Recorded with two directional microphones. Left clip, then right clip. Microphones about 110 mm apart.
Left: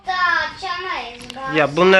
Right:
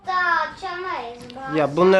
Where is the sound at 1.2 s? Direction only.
15° right (ahead or behind).